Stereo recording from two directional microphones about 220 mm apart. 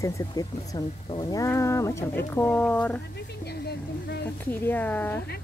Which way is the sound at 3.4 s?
45° left (ahead or behind).